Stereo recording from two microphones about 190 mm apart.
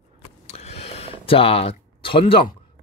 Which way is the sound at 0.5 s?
35° left (ahead or behind).